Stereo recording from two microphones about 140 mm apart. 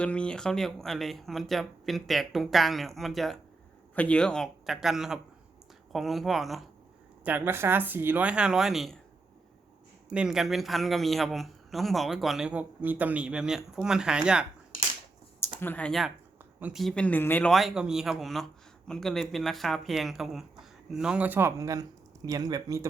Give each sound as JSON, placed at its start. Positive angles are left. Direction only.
{"t": 0.0, "sound": "a man's voice", "side_deg": 10}
{"t": 7.3, "sound": "speech", "side_deg": -15}
{"t": 10.1, "sound": "a man's voice", "side_deg": -5}
{"t": 15.6, "sound": "speech", "side_deg": 10}
{"t": 15.9, "sound": "a man's voice", "side_deg": 0}
{"t": 17.5, "sound": "a man's voice", "side_deg": 0}